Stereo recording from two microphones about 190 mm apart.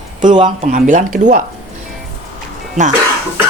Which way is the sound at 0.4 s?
45° right (ahead or behind).